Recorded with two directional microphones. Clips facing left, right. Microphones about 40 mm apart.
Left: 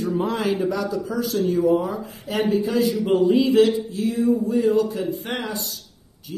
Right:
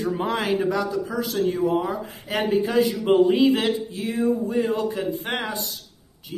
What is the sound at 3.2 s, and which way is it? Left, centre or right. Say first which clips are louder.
Speech: left 4 dB; right.